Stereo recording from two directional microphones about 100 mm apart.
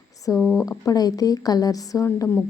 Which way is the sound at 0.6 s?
35° left (ahead or behind).